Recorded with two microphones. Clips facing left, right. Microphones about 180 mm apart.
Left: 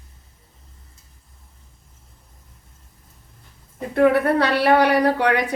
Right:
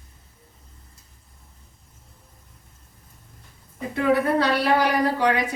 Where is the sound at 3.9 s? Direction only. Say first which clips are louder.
Left 4 dB; 60° left (ahead or behind).